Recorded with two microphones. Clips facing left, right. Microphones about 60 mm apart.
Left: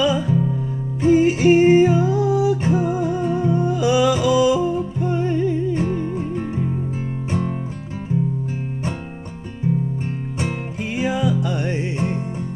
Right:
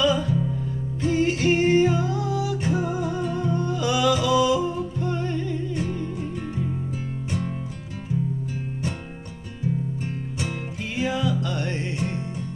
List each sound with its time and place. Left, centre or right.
0.0 s music: centre
5.7 s music: left
11.0 s music: centre